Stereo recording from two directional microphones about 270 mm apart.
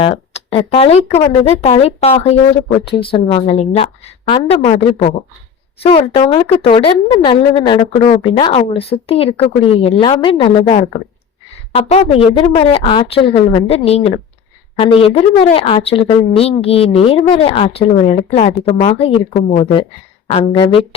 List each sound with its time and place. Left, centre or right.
0.0 s speech: left